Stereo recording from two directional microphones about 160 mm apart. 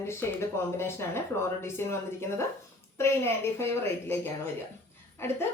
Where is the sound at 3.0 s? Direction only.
15° left (ahead or behind).